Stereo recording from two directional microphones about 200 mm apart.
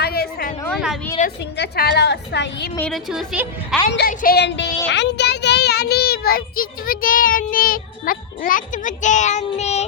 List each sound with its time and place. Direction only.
0.0 s a sound: 50° left (ahead or behind)
1.2 s a woman's voice: 35° left (ahead or behind)
1.5 s a woman's voice: 55° left (ahead or behind)
2.7 s a woman's voice: 5° left (ahead or behind)
3.9 s speech: 50° left (ahead or behind)